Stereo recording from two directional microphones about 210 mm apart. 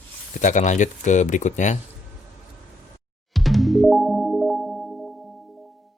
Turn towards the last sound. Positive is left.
turn(degrees=0)  # may be behind; listen again after turning